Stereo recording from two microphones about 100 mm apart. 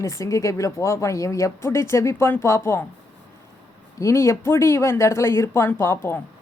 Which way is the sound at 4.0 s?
30° left (ahead or behind).